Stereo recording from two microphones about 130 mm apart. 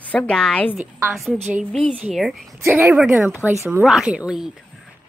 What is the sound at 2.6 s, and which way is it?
A woman's voice, 15° right (ahead or behind).